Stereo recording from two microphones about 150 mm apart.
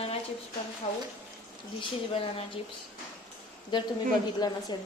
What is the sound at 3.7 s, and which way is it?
Speech, 30° left (ahead or behind).